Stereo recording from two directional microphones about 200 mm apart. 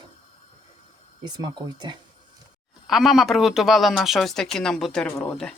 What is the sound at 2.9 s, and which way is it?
Speech, centre (ahead or behind).